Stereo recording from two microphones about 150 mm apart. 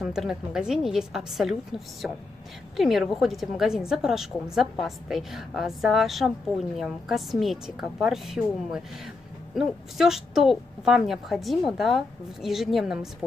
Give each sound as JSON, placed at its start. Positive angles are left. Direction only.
{"t": 0.0, "sound": "a woman's voice", "side_deg": 0}